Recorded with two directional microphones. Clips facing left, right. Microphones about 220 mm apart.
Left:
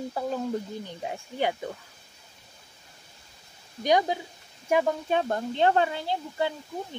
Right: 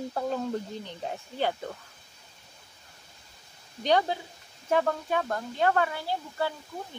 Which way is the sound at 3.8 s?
10° left (ahead or behind).